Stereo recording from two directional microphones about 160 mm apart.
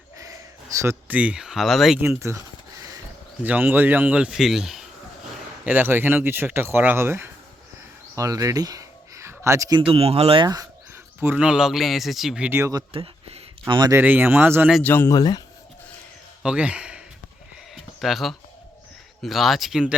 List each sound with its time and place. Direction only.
0.2 s speech: 20° right (ahead or behind); by 2.0 s centre (ahead or behind)
2.0 s speech: 15° right (ahead or behind)
3.4 s speech: 10° right (ahead or behind)
8.1 s a sound: 20° right (ahead or behind)
9.8 s speech: 35° right (ahead or behind)
10.4 s speech: 20° right (ahead or behind); by 12.5 s centre (ahead or behind)
12.5 s speech: 15° right (ahead or behind)
12.9 s a sound: 35° right (ahead or behind)
13.9 s speech: 10° right (ahead or behind)
14.8 s speech: 15° left (ahead or behind)
15.2 s speech: 25° left (ahead or behind)
16.4 s speech: 5° right (ahead or behind)
18.0 s speech: centre (ahead or behind)